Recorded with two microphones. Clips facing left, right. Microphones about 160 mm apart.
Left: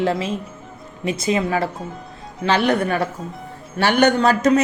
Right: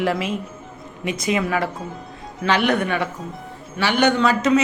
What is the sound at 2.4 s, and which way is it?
Speech, 30° left (ahead or behind).